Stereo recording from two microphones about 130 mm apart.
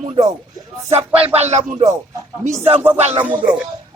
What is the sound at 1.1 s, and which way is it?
Speech, 50° right (ahead or behind).